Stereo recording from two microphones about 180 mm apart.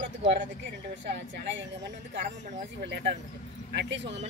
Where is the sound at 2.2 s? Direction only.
40° right (ahead or behind).